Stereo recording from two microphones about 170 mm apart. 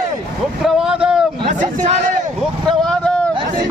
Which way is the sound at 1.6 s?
50° right (ahead or behind).